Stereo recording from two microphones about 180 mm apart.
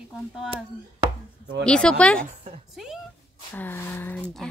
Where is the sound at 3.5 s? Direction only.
10° left (ahead or behind).